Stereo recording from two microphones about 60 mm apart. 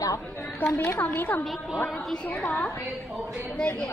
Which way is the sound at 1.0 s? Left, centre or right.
Left.